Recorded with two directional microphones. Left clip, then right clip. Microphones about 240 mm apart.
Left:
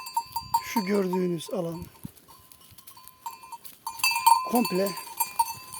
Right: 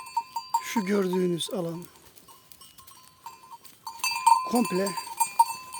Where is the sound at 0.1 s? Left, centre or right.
Left.